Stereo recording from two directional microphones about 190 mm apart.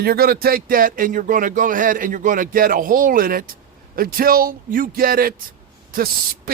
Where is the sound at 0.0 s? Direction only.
50° right (ahead or behind).